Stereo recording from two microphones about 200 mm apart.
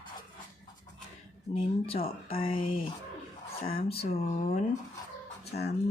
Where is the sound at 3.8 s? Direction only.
30° left (ahead or behind).